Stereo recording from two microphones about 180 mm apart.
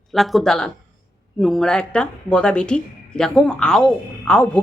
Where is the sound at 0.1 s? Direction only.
Centre (ahead or behind).